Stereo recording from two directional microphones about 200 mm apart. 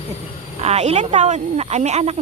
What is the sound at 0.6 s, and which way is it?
Speech, 30° right (ahead or behind).